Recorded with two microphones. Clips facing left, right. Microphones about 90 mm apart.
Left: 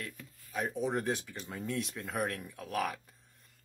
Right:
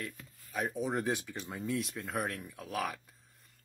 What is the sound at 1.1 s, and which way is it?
Speech, 15° right (ahead or behind).